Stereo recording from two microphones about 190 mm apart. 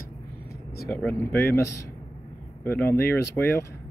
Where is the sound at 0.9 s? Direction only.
10° left (ahead or behind).